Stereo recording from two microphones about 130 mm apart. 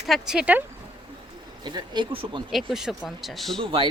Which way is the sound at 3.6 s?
45° right (ahead or behind).